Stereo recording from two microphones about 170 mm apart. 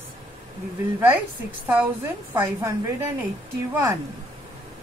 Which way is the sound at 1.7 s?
10° right (ahead or behind).